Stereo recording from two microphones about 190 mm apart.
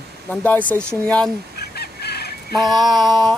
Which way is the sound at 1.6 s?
55° left (ahead or behind).